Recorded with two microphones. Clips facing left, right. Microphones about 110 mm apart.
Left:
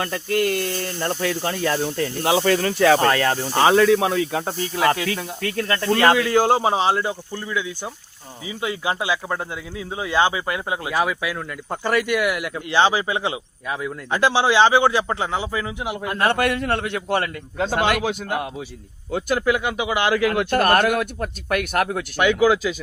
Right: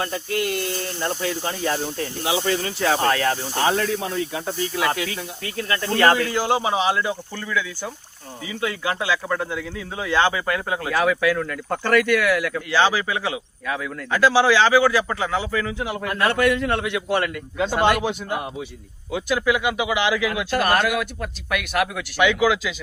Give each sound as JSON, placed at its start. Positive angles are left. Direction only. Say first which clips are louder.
{"t": 0.0, "sound": "speech", "louder": "left 3 dB", "side_deg": 55}
{"t": 1.2, "sound": "speech", "louder": "left 2 dB", "side_deg": 65}
{"t": 5.0, "sound": "speech", "louder": "left 5 dB", "side_deg": 65}
{"t": 6.3, "sound": "a man's voice", "louder": "left 4 dB", "side_deg": 45}
{"t": 7.3, "sound": "speech", "louder": "even", "side_deg": 20}
{"t": 16.4, "sound": "speech", "louder": "right 1 dB", "side_deg": 55}
{"t": 18.0, "sound": "speech", "louder": "left 1 dB", "side_deg": 65}
{"t": 19.1, "sound": "speech", "louder": "left 1 dB", "side_deg": 45}